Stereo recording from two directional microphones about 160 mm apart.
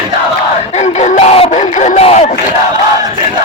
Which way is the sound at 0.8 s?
45° left (ahead or behind).